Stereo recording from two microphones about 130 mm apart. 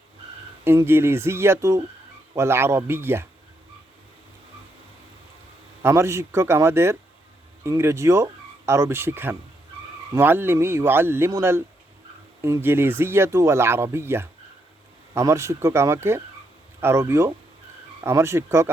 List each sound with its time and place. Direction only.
0.6 s speech: 15° right (ahead or behind)
5.8 s speech: 20° right (ahead or behind)